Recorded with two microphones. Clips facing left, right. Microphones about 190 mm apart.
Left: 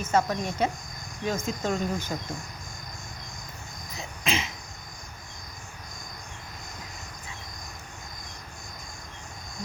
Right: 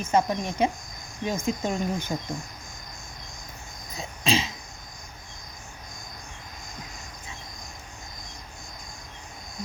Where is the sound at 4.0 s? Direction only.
30° right (ahead or behind).